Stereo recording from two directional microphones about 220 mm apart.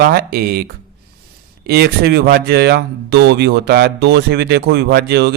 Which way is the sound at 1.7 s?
45° right (ahead or behind).